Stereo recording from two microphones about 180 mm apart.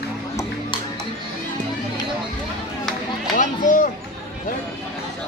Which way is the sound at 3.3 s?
45° left (ahead or behind).